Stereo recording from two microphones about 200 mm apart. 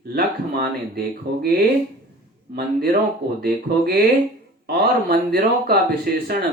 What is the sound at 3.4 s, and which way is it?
Speech, 50° right (ahead or behind).